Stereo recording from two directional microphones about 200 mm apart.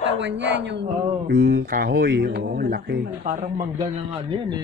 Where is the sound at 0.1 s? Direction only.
60° right (ahead or behind); by 3.6 s 40° right (ahead or behind).